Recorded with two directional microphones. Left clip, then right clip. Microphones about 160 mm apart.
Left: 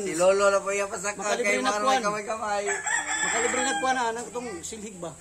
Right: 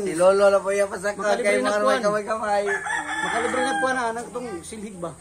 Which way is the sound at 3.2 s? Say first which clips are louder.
Right 5 dB; 30° left (ahead or behind).